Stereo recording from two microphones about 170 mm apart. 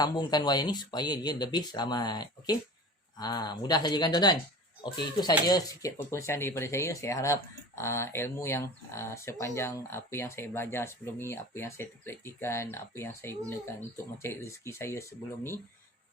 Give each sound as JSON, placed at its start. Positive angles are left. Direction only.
{"t": 0.0, "sound": "speech", "side_deg": 25}